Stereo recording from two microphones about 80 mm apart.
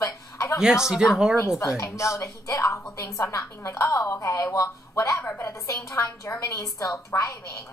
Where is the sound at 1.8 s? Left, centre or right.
Left.